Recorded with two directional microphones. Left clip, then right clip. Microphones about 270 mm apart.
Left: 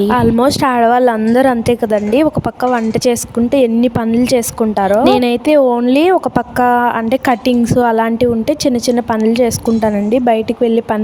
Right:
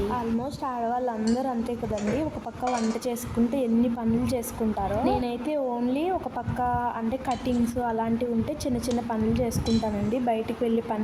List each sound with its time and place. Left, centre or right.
0.1 s a woman's voice: left
3.0 s a woman's voice: left